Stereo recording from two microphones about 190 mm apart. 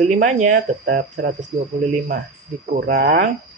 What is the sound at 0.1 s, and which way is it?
Speech, 40° right (ahead or behind).